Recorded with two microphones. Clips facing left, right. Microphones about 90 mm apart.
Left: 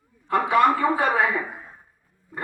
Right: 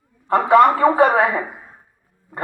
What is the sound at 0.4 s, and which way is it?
Speech, 50° right (ahead or behind).